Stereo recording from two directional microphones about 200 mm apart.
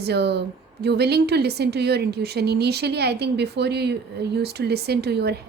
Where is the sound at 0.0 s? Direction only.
55° right (ahead or behind).